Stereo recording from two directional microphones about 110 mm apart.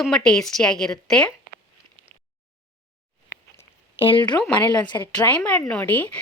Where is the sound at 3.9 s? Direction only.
55° left (ahead or behind).